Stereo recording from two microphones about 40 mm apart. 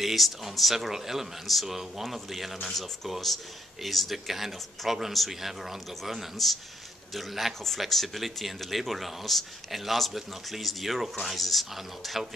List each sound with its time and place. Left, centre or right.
0.0 s speech: centre